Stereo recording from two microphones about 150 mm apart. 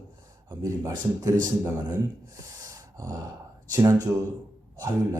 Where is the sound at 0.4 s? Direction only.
25° right (ahead or behind).